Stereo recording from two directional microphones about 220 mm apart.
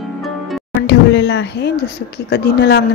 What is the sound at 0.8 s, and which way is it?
Speech, 50° left (ahead or behind).